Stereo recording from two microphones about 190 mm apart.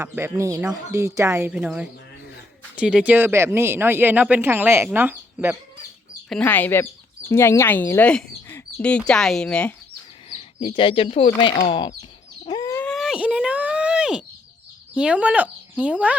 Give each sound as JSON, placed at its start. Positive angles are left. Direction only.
{"t": 0.0, "sound": "speech", "side_deg": -15}
{"t": 6.2, "sound": "speech", "side_deg": 5}
{"t": 10.2, "sound": "speech", "side_deg": 25}
{"t": 12.5, "sound": "bird", "side_deg": 20}
{"t": 12.8, "sound": "a sound", "side_deg": 0}
{"t": 14.9, "sound": "speech", "side_deg": -5}